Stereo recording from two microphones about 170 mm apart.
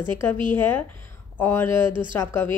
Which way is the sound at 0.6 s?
10° left (ahead or behind).